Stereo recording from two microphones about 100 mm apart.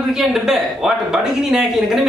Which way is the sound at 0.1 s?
5° right (ahead or behind).